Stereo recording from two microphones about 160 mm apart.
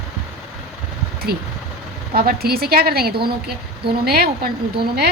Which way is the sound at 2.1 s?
70° right (ahead or behind).